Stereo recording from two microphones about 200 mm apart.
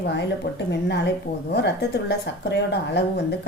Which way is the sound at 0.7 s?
55° left (ahead or behind).